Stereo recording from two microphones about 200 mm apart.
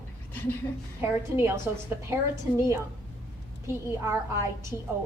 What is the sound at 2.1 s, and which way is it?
Speech, 15° right (ahead or behind).